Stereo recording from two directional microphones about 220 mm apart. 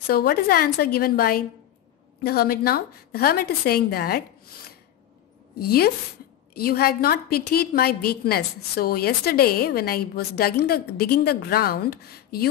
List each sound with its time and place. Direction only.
0.0 s a woman's voice: 45° left (ahead or behind)
5.6 s a woman's voice: 45° left (ahead or behind)